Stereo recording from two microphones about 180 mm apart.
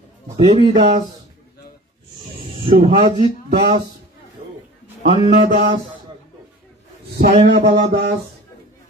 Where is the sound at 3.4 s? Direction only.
40° right (ahead or behind).